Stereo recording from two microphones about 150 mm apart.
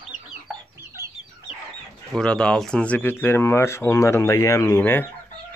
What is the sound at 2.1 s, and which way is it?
Speech, 5° left (ahead or behind).